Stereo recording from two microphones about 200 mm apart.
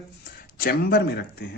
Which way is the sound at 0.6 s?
50° left (ahead or behind).